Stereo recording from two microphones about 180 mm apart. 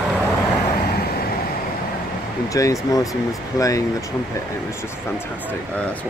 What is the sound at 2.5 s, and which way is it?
Speech, 20° left (ahead or behind).